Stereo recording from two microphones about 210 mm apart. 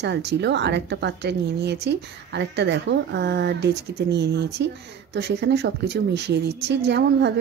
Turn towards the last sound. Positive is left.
turn(degrees=-55)  # may be behind; listen again after turning